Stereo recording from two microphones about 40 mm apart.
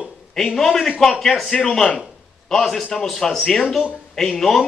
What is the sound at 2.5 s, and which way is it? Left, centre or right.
A man's voice, centre.